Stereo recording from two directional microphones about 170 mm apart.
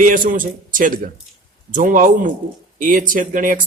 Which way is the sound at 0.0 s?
50° right (ahead or behind).